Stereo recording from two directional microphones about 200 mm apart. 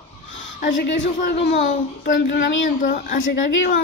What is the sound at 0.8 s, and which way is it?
Speech, 60° left (ahead or behind).